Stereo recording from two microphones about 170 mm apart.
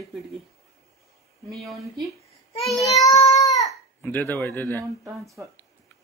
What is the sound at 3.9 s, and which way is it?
Speech, 10° left (ahead or behind).